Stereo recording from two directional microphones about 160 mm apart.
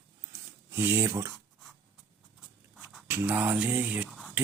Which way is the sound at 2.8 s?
Centre (ahead or behind).